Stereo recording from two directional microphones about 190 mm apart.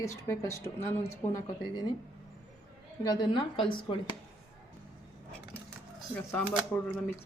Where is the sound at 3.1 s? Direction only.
25° left (ahead or behind).